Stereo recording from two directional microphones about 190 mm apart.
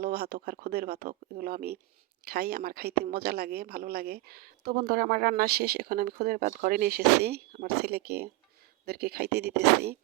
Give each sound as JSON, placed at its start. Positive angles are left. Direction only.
{"t": 0.0, "sound": "speech", "side_deg": -55}